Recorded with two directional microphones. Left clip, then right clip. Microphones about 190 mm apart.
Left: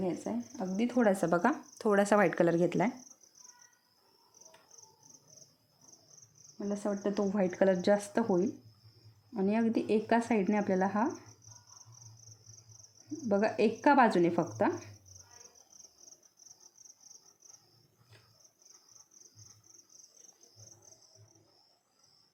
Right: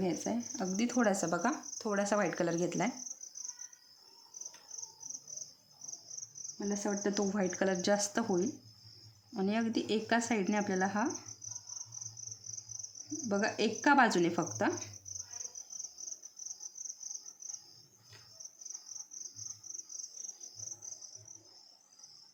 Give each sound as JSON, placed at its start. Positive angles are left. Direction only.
{"t": 0.0, "sound": "speech", "side_deg": -10}
{"t": 0.5, "sound": "speech", "side_deg": 5}
{"t": 1.1, "sound": "speech", "side_deg": 30}
{"t": 6.6, "sound": "speech", "side_deg": 10}
{"t": 7.3, "sound": "speech", "side_deg": 20}
{"t": 13.2, "sound": "speech", "side_deg": 20}